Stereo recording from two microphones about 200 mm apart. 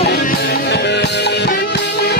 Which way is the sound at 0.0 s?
55° left (ahead or behind).